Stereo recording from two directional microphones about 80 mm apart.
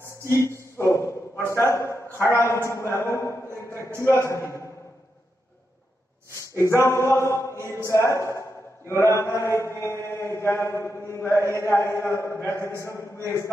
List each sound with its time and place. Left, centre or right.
0.3 s a man's voice: left
6.3 s a sound: left
7.9 s a man's voice: left